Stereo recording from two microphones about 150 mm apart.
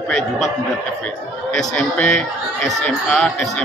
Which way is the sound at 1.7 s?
5° left (ahead or behind).